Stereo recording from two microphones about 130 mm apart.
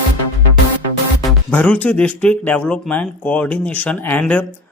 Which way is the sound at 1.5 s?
10° left (ahead or behind).